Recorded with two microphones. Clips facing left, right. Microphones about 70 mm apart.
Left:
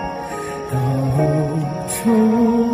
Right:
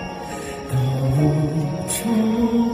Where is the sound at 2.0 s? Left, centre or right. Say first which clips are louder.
Left 5 dB; left.